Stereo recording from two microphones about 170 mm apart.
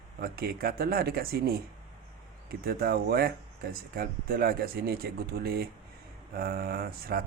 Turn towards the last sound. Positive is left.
turn(degrees=-65)  # may be behind; listen again after turning